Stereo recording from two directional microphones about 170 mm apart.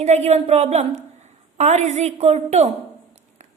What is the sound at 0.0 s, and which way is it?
A woman's voice, 40° right (ahead or behind).